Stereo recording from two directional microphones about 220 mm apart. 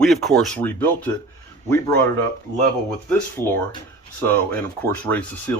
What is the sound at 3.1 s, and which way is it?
Speech, 10° left (ahead or behind).